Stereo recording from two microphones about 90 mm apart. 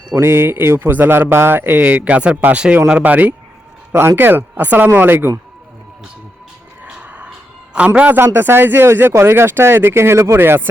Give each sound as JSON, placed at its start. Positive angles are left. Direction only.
{"t": 0.1, "sound": "a man's voice", "side_deg": -30}
{"t": 6.8, "sound": "a sound", "side_deg": -10}
{"t": 7.3, "sound": "a man's voice", "side_deg": -10}